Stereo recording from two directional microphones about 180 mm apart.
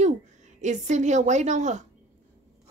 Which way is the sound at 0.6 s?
40° right (ahead or behind).